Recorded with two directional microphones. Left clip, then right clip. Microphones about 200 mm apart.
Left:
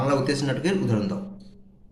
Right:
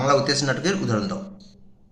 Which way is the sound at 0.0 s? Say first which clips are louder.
Right 4 dB; centre (ahead or behind).